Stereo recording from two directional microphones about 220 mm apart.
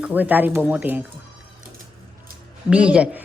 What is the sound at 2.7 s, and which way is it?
Speech, 5° right (ahead or behind).